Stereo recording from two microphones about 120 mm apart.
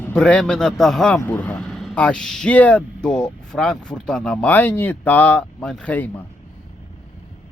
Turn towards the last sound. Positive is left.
turn(degrees=15)  # may be behind; listen again after turning